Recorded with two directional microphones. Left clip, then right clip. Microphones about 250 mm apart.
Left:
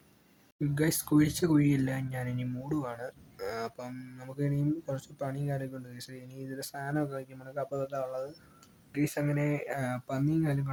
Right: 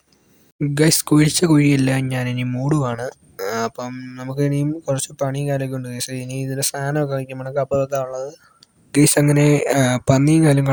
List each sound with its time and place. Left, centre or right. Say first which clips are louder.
0.7 s speech: right 13 dB; right
8.9 s speech: right 16 dB; right